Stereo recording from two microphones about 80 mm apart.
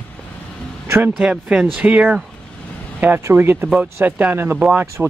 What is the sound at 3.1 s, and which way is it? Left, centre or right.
Speech, right.